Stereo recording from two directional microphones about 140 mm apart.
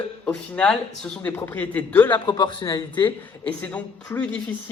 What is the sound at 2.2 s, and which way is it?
Speech, 35° left (ahead or behind).